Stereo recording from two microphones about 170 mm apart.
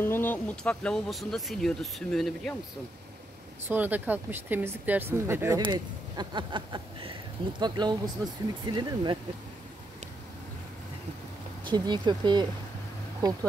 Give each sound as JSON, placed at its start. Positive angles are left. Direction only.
{"t": 0.0, "sound": "speech", "side_deg": 10}
{"t": 3.6, "sound": "speech", "side_deg": -10}
{"t": 5.6, "sound": "speech", "side_deg": -25}
{"t": 11.6, "sound": "speech", "side_deg": -25}